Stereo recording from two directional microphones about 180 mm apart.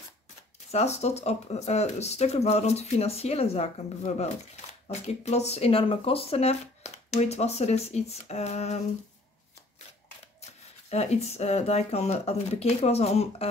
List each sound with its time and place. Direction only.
0.7 s speech: 35° left (ahead or behind)
10.4 s speech: 35° left (ahead or behind)